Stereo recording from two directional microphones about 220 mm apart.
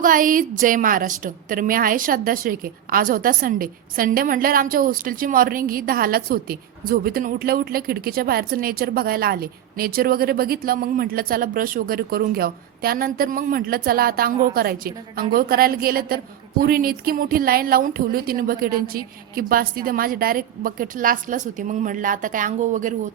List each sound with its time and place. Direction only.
0.0 s a woman's voice: 40° right (ahead or behind)